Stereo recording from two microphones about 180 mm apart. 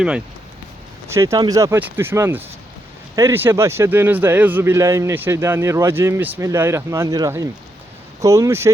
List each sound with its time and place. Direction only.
1.0 s a man's voice: 15° right (ahead or behind)